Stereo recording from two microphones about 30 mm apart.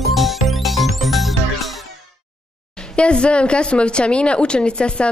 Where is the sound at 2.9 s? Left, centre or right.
Left.